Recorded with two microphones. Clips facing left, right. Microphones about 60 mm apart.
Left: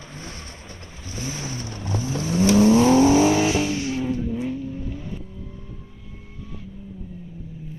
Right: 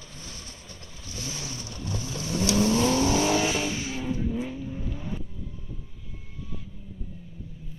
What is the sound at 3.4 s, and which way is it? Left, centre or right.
Vehicle, centre.